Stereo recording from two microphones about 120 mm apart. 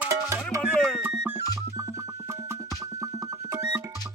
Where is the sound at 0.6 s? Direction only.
5° left (ahead or behind).